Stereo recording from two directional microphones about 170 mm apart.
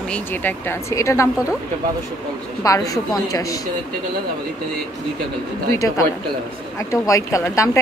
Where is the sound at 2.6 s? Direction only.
20° left (ahead or behind).